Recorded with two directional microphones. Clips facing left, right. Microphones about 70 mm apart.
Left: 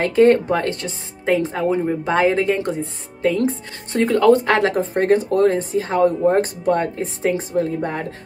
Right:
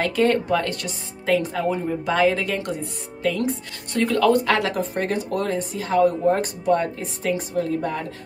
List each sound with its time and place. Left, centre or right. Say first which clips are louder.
0.0 s speech: left 6 dB; left